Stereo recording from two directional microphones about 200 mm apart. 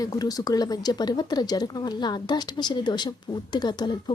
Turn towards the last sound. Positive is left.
turn(degrees=20)  # may be behind; listen again after turning